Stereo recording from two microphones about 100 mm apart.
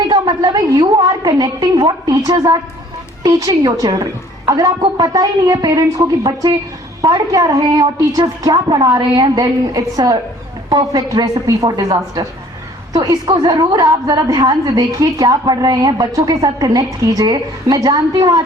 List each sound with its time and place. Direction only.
0.1 s a woman's voice: 45° right (ahead or behind)